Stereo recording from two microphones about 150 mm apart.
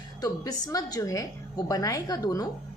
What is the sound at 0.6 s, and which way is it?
A woman's voice, 25° left (ahead or behind).